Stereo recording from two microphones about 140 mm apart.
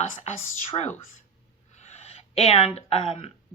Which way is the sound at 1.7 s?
50° left (ahead or behind).